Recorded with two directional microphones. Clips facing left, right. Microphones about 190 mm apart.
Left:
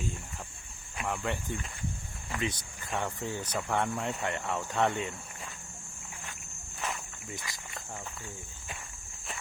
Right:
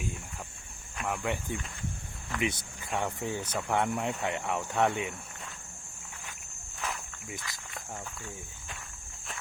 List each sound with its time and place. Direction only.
0.9 s speech: 5° right (ahead or behind)
7.3 s speech: 20° left (ahead or behind)